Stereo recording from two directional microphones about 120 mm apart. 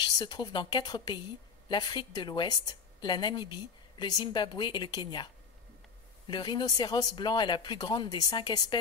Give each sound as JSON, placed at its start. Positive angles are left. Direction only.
{"t": 0.0, "sound": "a woman's voice", "side_deg": 35}